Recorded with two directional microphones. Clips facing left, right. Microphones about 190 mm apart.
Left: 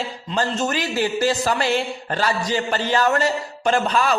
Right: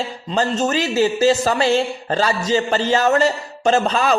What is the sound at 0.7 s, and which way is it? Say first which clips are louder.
Speech: right 5 dB; 25° right (ahead or behind).